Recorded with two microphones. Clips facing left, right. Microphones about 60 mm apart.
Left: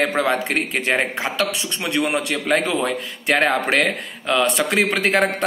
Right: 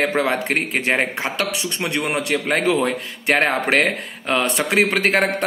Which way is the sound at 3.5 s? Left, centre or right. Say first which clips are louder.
Right 1 dB; right.